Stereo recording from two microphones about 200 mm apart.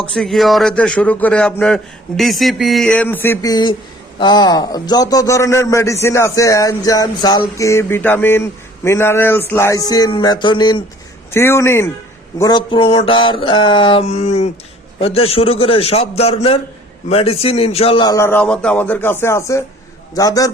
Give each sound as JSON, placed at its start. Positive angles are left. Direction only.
{"t": 0.0, "sound": "a sound", "side_deg": 0}
{"t": 4.2, "sound": "a man's voice", "side_deg": 20}
{"t": 11.3, "sound": "a man's voice", "side_deg": 10}
{"t": 12.4, "sound": "mantra", "side_deg": 20}
{"t": 17.1, "sound": "a man's voice", "side_deg": 30}